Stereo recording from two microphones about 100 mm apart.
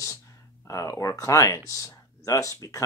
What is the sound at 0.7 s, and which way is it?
Speech, 35° left (ahead or behind).